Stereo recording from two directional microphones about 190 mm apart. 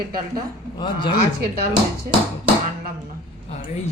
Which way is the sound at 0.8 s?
25° left (ahead or behind).